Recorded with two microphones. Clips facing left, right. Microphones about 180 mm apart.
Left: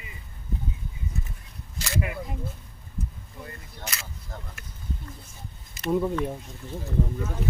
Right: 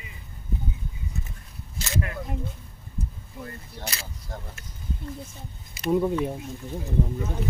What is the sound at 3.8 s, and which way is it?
Speech, 35° right (ahead or behind).